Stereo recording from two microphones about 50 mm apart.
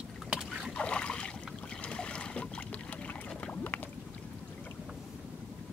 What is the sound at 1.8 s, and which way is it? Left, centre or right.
Boat, centre.